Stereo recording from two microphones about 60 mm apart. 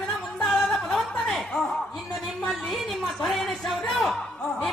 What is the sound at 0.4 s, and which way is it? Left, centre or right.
Music, centre.